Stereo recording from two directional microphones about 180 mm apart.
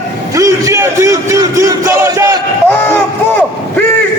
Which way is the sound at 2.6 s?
10° left (ahead or behind).